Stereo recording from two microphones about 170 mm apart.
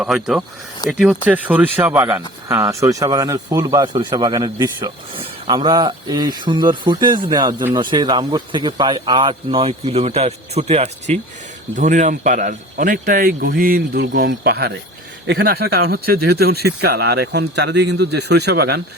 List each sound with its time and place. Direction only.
0.0 s a man's voice: 5° right (ahead or behind); by 18.8 s 75° right (ahead or behind)